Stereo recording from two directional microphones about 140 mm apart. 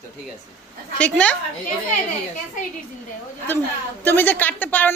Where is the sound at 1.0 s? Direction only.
10° left (ahead or behind).